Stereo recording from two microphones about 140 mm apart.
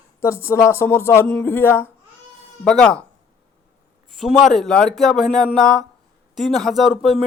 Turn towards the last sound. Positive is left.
turn(degrees=0)  # may be behind; listen again after turning